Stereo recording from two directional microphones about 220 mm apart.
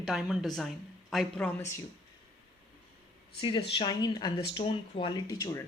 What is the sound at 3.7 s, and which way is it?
Speech, 20° left (ahead or behind).